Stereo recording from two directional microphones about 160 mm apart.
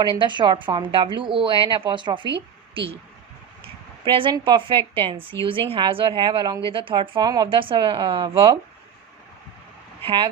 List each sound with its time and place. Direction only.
0.0 s a woman's voice: 30° right (ahead or behind)
4.0 s a woman's voice: 30° right (ahead or behind)
10.0 s a woman's voice: 35° right (ahead or behind)